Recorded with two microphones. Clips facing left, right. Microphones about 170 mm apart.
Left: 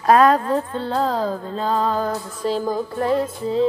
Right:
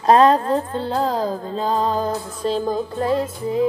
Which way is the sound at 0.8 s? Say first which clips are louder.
Even; 15° right (ahead or behind).